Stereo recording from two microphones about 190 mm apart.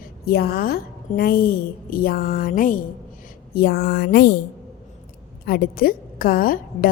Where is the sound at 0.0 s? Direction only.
55° left (ahead or behind).